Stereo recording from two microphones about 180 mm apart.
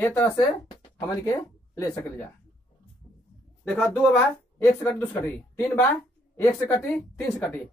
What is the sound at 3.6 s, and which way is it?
Speech, 10° left (ahead or behind).